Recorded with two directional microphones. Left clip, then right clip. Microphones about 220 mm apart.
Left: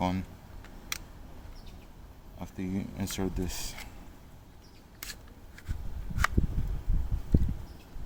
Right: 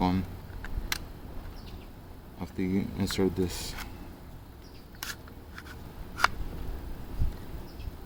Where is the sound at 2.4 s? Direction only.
35° left (ahead or behind).